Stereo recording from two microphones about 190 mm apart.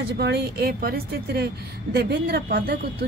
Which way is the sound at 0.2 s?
60° right (ahead or behind).